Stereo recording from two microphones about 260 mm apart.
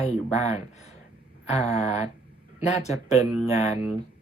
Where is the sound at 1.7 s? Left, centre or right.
Left.